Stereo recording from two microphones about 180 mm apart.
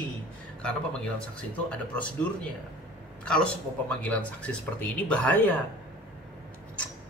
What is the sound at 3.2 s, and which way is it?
Speech, 5° left (ahead or behind).